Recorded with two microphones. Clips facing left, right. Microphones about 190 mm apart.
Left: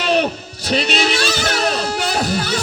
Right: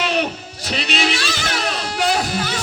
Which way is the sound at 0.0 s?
35° left (ahead or behind).